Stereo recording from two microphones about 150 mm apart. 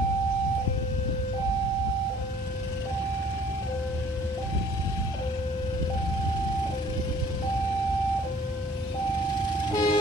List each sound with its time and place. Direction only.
9.7 s vehicle: 30° left (ahead or behind)